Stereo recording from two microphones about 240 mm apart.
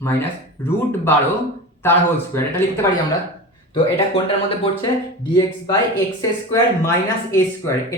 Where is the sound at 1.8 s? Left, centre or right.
Centre.